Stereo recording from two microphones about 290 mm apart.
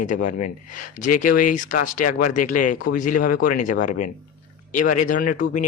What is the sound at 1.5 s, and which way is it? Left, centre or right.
A man's voice, left.